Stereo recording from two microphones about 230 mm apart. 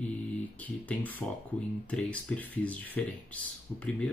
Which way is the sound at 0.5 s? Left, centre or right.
Centre.